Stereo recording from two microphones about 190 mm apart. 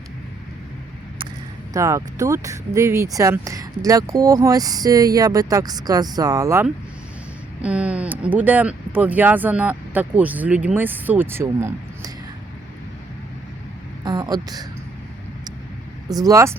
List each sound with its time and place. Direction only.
1.7 s speech: 15° right (ahead or behind)
14.0 s speech: 20° right (ahead or behind)
16.0 s speech: 20° right (ahead or behind)